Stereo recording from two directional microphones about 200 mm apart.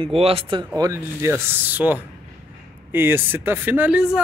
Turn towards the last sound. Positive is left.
turn(degrees=-5)  # may be behind; listen again after turning